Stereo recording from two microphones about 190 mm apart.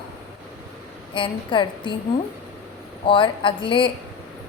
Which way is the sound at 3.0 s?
25° left (ahead or behind).